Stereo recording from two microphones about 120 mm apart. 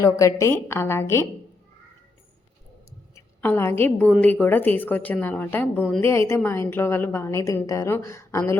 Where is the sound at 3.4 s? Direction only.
15° left (ahead or behind).